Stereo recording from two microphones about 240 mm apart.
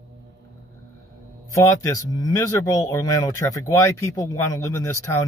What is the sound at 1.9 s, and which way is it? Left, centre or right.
Speech, centre.